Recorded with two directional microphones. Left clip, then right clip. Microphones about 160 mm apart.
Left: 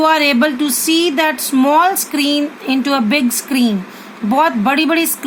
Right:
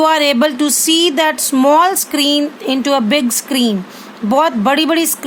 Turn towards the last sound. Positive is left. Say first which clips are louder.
# right 1 dB
turn(degrees=-30)  # may be behind; listen again after turning